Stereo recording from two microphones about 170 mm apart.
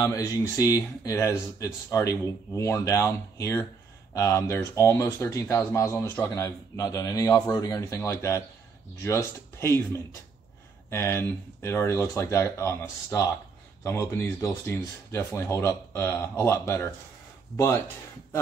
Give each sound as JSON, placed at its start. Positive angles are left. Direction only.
{"t": 0.0, "sound": "speech", "side_deg": 20}